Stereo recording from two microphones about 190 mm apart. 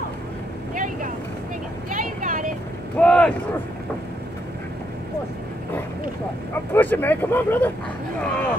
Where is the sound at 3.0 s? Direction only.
5° left (ahead or behind).